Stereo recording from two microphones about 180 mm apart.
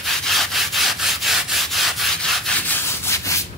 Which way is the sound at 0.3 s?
Centre (ahead or behind).